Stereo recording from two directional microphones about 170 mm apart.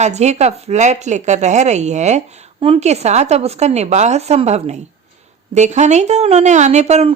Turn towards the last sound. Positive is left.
turn(degrees=-40)  # may be behind; listen again after turning